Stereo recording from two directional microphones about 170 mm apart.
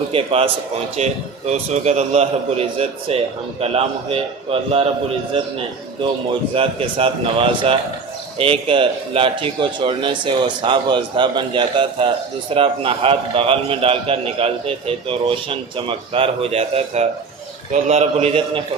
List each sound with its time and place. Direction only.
0.1 s a man's voice: 35° right (ahead or behind)
6.5 s a man's voice: 35° right (ahead or behind)